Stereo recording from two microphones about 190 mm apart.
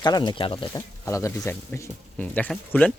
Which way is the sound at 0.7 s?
15° left (ahead or behind).